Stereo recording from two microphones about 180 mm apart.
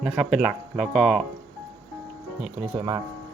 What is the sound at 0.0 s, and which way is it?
Speech, centre (ahead or behind).